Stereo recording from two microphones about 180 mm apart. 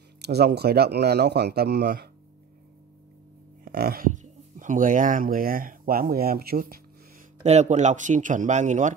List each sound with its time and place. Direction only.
0.2 s speech: 65° right (ahead or behind)
3.6 s speech: 60° right (ahead or behind)
7.4 s speech: 40° right (ahead or behind)